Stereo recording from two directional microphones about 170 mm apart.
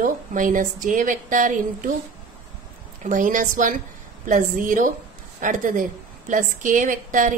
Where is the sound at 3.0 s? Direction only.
50° right (ahead or behind).